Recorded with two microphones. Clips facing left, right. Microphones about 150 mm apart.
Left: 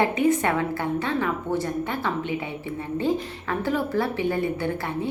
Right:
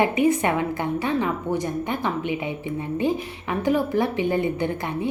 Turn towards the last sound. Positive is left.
turn(degrees=-20)  # may be behind; listen again after turning